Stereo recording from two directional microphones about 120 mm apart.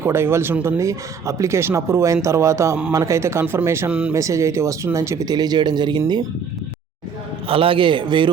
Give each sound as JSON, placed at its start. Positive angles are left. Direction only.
{"t": 0.0, "sound": "speech", "side_deg": -20}
{"t": 7.4, "sound": "a man's voice", "side_deg": -50}